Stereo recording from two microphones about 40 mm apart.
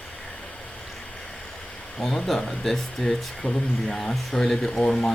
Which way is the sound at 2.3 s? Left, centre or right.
Centre.